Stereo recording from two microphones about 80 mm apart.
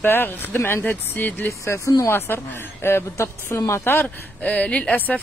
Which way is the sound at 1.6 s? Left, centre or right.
Left.